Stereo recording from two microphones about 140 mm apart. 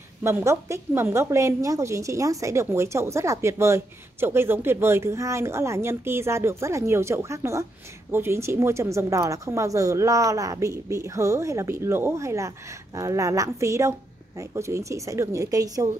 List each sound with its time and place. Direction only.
0.2 s a woman's voice: 20° right (ahead or behind)